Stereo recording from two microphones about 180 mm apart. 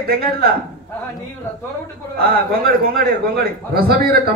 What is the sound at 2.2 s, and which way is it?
A man's voice, 55° right (ahead or behind).